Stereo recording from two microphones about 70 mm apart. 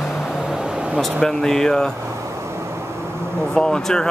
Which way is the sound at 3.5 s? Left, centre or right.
Centre.